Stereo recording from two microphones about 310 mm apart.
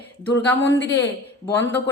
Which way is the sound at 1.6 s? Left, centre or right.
Centre.